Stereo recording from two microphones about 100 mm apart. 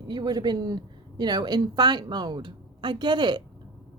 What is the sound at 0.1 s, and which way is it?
A woman's voice, 45° right (ahead or behind).